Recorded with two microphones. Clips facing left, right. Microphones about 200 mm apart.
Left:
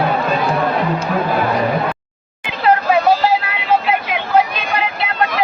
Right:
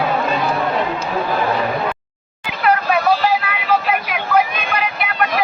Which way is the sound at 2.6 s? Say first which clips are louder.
Left 3 dB; 25° left (ahead or behind).